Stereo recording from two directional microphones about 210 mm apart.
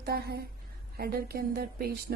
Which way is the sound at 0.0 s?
50° right (ahead or behind).